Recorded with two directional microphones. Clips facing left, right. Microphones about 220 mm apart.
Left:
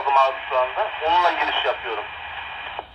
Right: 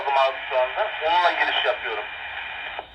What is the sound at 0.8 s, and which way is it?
Speech, 5° right (ahead or behind).